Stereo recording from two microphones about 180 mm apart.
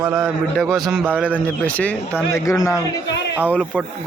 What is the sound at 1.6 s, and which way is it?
Speech, 5° left (ahead or behind).